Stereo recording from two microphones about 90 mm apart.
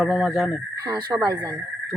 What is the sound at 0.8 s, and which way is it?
Speech, 50° right (ahead or behind).